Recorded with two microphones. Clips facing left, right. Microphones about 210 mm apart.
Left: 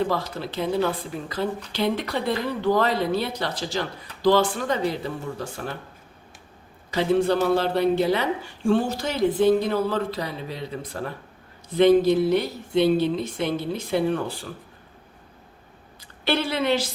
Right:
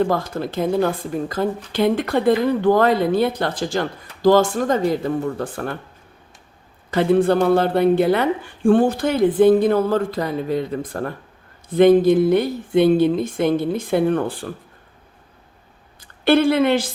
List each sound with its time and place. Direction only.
0.0 s speech: 50° right (ahead or behind)
6.9 s speech: 55° right (ahead or behind)
16.0 s a woman's voice: 50° right (ahead or behind)